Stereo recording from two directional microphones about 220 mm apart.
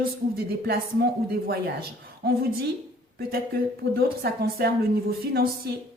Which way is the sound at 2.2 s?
45° right (ahead or behind).